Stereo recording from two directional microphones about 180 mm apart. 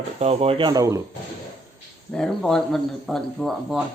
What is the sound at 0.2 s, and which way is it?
Speech, 35° right (ahead or behind).